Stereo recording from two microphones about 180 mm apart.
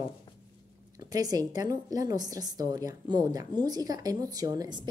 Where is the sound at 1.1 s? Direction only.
20° right (ahead or behind).